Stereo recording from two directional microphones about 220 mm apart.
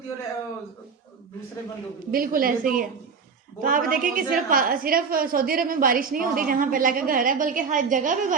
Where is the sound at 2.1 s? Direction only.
40° right (ahead or behind).